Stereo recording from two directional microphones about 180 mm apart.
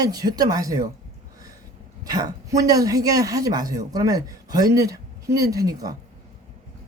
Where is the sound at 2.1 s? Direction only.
20° right (ahead or behind).